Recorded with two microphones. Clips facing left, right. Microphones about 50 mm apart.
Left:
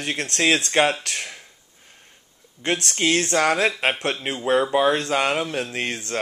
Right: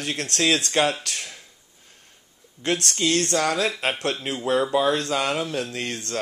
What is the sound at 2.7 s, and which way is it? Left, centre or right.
Speech, centre.